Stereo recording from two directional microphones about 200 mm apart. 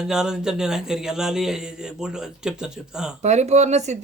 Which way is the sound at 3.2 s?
35° right (ahead or behind).